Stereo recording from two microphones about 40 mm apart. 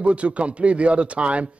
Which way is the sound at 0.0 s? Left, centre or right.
Right.